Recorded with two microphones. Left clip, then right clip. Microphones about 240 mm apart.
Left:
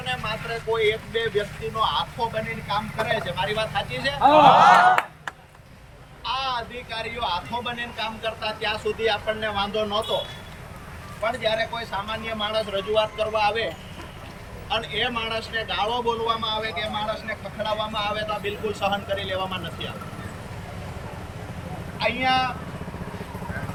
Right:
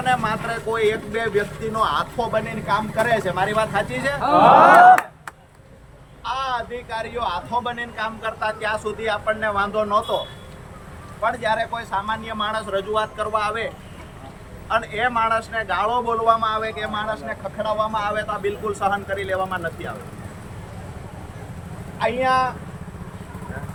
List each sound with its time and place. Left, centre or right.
0.0 s speech: centre
1.8 s a man's voice: centre
4.4 s speech: right
6.2 s a man's voice: centre
11.3 s a man's voice: centre
14.7 s a man's voice: centre
21.9 s a man's voice: centre